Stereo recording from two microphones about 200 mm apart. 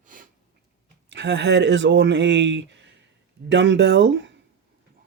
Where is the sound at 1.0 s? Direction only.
65° right (ahead or behind).